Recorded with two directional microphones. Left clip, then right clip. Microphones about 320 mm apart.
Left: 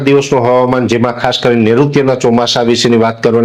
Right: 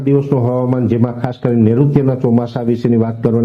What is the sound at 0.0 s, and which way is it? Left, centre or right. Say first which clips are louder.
Speech: left 6 dB; centre.